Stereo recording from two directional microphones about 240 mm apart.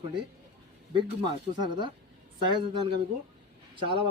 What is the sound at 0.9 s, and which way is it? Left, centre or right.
Speech, centre.